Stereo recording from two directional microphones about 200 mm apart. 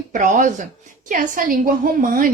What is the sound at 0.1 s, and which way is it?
A woman's voice, 40° right (ahead or behind).